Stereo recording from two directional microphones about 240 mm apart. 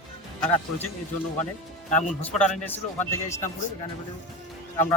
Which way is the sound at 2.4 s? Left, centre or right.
Centre.